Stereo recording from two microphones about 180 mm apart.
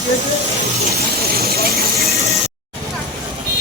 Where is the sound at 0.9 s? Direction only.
55° right (ahead or behind).